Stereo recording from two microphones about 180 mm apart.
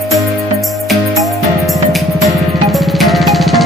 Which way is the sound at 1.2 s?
Centre (ahead or behind).